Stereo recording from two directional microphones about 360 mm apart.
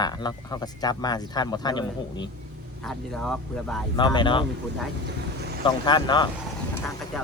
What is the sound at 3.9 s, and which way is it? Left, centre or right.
Speech, centre.